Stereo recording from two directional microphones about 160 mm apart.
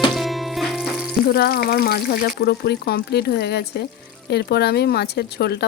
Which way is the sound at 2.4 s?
90° left.